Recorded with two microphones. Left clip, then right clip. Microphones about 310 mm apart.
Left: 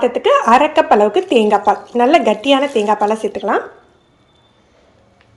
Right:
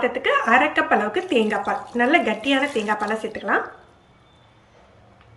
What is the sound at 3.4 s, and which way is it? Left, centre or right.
Speech, centre.